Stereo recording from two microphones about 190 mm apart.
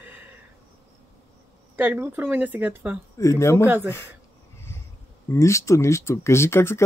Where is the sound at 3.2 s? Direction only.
15° left (ahead or behind).